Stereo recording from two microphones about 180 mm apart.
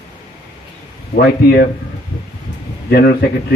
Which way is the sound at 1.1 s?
55° left (ahead or behind).